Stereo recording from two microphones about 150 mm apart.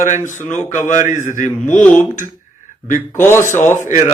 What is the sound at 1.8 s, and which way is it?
Speech, 10° left (ahead or behind).